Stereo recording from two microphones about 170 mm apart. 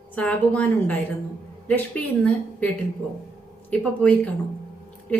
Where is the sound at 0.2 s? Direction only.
10° left (ahead or behind).